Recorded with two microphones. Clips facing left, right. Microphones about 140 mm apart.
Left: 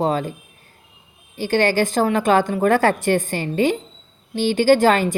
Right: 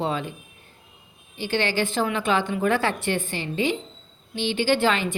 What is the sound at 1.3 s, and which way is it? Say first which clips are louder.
A woman's voice: left 7 dB; 45° left (ahead or behind).